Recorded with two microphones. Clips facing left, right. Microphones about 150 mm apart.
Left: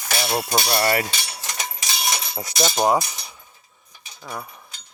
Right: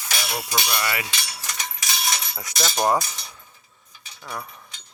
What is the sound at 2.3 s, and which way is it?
Speech, 25° left (ahead or behind).